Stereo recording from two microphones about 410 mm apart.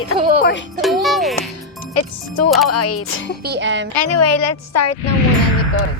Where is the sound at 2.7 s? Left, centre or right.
Left.